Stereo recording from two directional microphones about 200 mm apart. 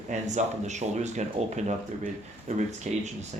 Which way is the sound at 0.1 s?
35° right (ahead or behind).